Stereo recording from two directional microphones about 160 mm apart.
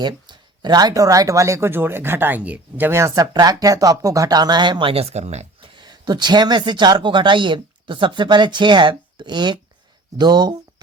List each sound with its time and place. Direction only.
0.0 s speech: 30° right (ahead or behind)